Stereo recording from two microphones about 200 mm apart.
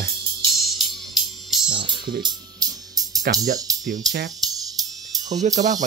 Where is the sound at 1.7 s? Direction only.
25° right (ahead or behind).